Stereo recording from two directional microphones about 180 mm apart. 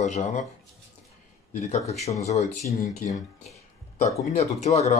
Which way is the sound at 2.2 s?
35° left (ahead or behind).